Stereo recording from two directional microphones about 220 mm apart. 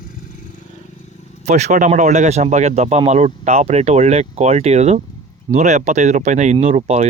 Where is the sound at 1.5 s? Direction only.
30° right (ahead or behind).